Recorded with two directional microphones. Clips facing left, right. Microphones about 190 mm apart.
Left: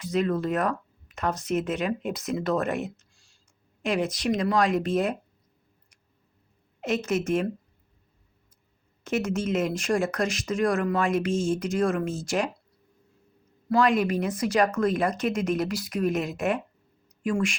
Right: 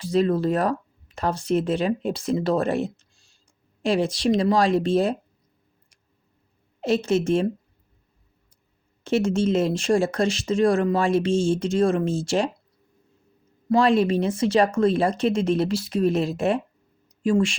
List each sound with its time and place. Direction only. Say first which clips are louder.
0.0 s speech: right 5 dB; 30° right (ahead or behind)
6.8 s speech: right 5 dB; 30° right (ahead or behind)
9.0 s speech: right 6 dB; 30° right (ahead or behind)
13.7 s speech: right 4 dB; 30° right (ahead or behind)